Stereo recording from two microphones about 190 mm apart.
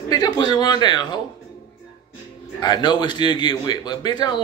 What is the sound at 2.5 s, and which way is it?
A man's voice, 20° left (ahead or behind).